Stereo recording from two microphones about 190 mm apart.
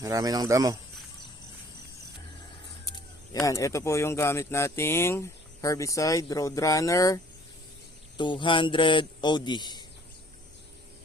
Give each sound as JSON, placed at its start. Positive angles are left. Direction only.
{"t": 0.0, "sound": "speech", "side_deg": -20}
{"t": 3.4, "sound": "speech", "side_deg": 15}
{"t": 8.2, "sound": "a man's voice", "side_deg": 25}